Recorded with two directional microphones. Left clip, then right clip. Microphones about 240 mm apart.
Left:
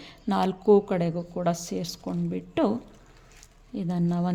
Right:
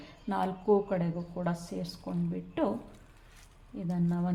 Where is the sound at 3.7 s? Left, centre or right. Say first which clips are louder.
Left 5 dB; left.